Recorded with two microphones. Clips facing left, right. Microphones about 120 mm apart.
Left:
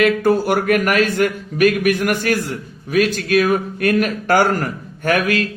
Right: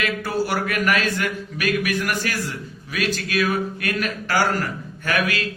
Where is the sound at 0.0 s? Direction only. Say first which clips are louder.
Left 9 dB; 55° left (ahead or behind).